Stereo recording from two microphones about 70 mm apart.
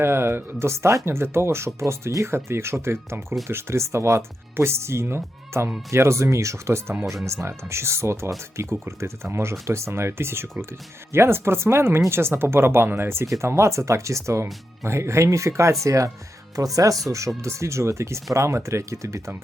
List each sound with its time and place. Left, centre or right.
0.0 s speech: right